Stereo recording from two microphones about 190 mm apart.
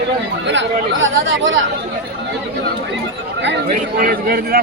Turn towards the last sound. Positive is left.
turn(degrees=-50)  # may be behind; listen again after turning